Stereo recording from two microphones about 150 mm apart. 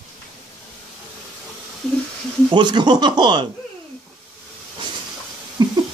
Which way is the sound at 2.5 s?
30° right (ahead or behind).